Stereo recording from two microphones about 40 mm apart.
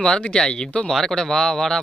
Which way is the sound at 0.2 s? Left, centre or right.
Left.